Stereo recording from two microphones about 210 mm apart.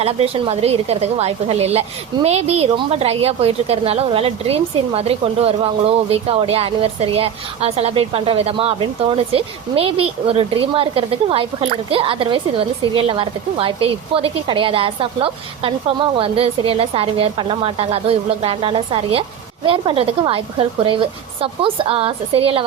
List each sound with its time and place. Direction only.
0.0 s a woman's voice: 25° right (ahead or behind)